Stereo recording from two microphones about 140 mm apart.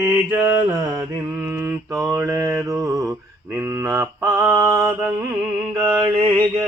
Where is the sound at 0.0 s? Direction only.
20° right (ahead or behind).